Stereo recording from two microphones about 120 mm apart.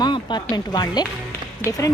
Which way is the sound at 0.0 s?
40° left (ahead or behind).